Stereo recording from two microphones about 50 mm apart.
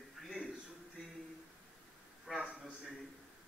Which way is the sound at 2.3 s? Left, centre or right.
Centre.